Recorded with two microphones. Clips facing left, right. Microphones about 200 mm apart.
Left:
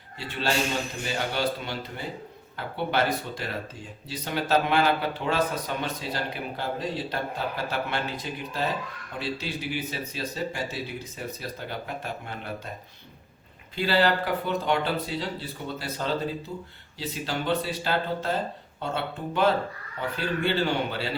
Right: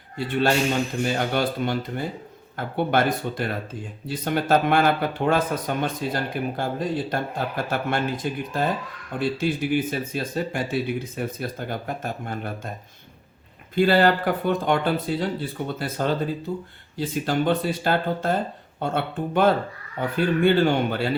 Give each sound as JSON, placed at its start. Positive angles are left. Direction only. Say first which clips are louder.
{"t": 0.2, "sound": "speech", "louder": "right 6 dB", "side_deg": -50}
{"t": 13.7, "sound": "speech", "louder": "right 5 dB", "side_deg": -50}